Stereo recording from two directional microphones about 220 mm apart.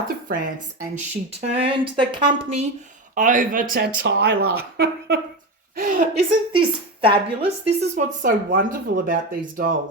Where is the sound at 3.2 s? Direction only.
35° right (ahead or behind).